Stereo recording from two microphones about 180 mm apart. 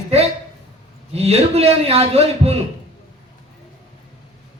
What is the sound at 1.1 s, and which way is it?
A man's voice, 35° right (ahead or behind).